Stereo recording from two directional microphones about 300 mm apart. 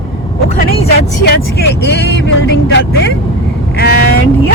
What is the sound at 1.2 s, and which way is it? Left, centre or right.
Speech, left.